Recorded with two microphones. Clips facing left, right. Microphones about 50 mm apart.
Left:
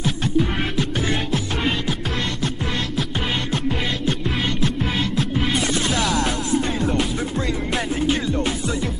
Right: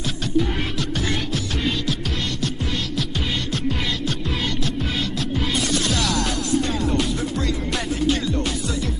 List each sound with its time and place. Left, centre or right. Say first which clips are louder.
5.4 s music: even; left
6.9 s music: even; centre